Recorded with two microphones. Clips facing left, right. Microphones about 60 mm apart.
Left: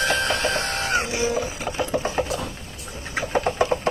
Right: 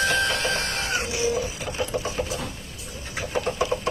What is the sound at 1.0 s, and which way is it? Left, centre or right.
Music, left.